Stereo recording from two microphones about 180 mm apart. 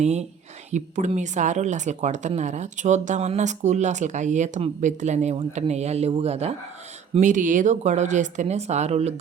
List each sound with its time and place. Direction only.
0.0 s speech: 40° right (ahead or behind)